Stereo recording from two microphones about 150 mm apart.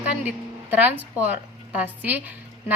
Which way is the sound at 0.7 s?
10° right (ahead or behind).